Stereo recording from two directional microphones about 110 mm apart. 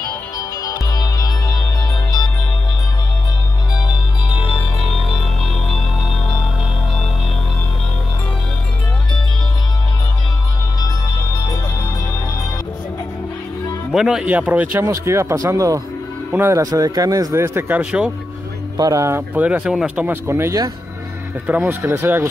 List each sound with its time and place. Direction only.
0.4 s music: 35° left (ahead or behind)
13.9 s a man's voice: 5° right (ahead or behind)
14.9 s speech: 25° right (ahead or behind)
16.3 s speech: 20° right (ahead or behind)
18.8 s speech: 30° right (ahead or behind)
19.4 s a man's voice: 10° right (ahead or behind)
20.1 s a man's voice: 20° right (ahead or behind)